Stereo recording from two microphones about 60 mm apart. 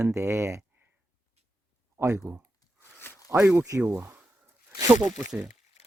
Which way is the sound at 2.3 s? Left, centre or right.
Right.